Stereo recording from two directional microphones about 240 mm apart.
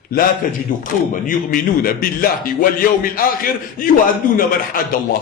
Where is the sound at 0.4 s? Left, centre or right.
Left.